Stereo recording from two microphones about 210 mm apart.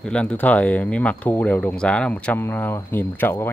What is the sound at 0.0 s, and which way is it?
Speech, 5° left (ahead or behind).